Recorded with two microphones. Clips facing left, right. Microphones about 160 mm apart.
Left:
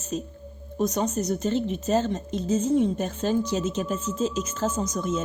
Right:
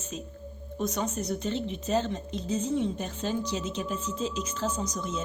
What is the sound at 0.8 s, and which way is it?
A woman's voice, 40° left (ahead or behind).